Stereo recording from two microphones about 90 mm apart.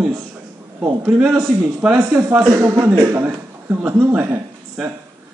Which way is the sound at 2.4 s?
40° right (ahead or behind).